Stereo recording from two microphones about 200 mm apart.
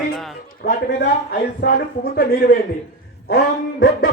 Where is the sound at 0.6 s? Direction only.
50° left (ahead or behind).